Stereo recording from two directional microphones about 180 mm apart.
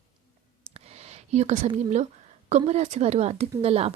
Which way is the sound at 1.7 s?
40° right (ahead or behind).